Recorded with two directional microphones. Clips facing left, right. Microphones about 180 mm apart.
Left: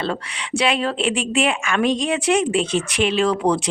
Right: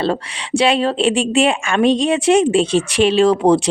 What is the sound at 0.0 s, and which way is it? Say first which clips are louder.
A woman's voice: right 6 dB; 30° right (ahead or behind).